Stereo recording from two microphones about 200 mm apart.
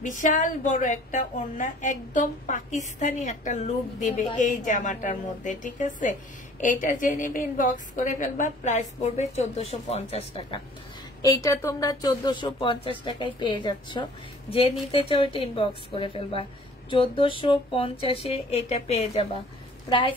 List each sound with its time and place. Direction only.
0.0 s a woman's voice: 40° left (ahead or behind)
11.2 s speech: 15° left (ahead or behind)